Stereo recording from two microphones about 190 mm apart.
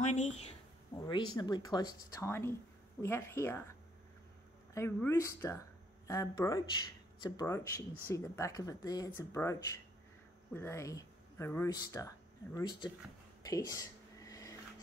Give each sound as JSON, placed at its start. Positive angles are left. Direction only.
{"t": 0.0, "sound": "a woman's voice", "side_deg": 40}
{"t": 0.9, "sound": "a woman's voice", "side_deg": 20}
{"t": 4.7, "sound": "a woman's voice", "side_deg": 15}
{"t": 13.4, "sound": "a sound", "side_deg": 15}